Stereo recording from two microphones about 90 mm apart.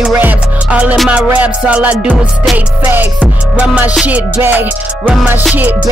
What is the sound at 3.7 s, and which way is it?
Music, 15° right (ahead or behind).